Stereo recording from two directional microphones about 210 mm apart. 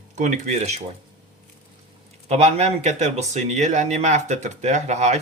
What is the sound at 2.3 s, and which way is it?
Speech, 30° right (ahead or behind).